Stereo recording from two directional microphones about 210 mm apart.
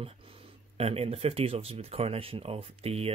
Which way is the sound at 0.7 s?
30° right (ahead or behind).